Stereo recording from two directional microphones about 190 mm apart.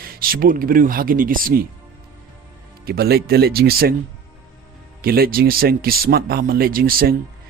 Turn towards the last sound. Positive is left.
turn(degrees=-50)  # may be behind; listen again after turning